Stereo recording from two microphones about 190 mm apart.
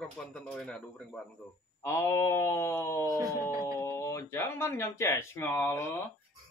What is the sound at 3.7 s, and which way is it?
Speech, 15° left (ahead or behind).